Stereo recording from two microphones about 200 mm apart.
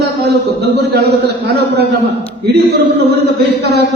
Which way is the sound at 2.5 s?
55° right (ahead or behind).